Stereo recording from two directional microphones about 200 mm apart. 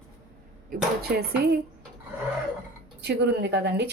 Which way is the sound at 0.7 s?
55° right (ahead or behind).